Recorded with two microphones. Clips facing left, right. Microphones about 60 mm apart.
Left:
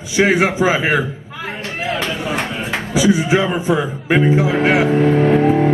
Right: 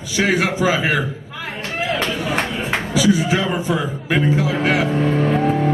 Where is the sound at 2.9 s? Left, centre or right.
Left.